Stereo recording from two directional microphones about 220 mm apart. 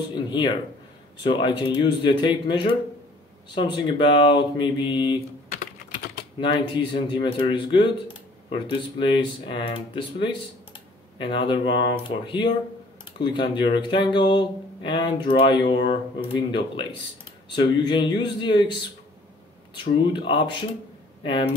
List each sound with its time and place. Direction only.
0.3 s speech: 20° left (ahead or behind)
6.4 s speech: 20° left (ahead or behind)
19.7 s speech: 20° left (ahead or behind)